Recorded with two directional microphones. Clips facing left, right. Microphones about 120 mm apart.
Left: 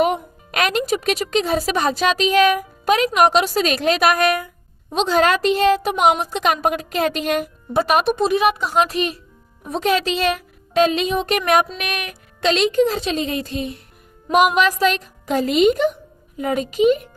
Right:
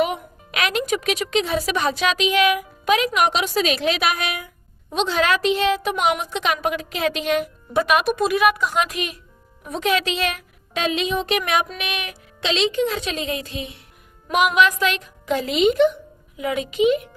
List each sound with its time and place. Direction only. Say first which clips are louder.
0.0 s a woman's voice: left 4 dB; 40° left (ahead or behind)